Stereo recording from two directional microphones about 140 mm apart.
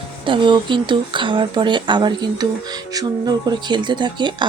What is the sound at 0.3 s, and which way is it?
Speech, 35° right (ahead or behind).